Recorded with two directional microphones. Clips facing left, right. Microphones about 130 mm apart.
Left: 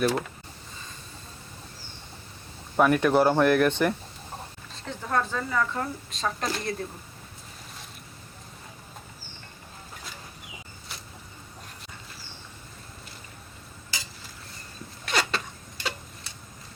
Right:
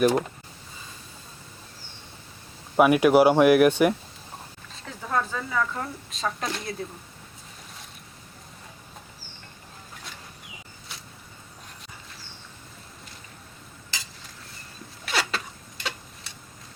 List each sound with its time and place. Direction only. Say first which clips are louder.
0.0 s speech: right 4 dB; 15° right (ahead or behind)
2.7 s speech: right 4 dB; 10° right (ahead or behind)
15.0 s a sound: left 1 dB; centre (ahead or behind)
15.8 s tick-tock: left 1 dB; centre (ahead or behind)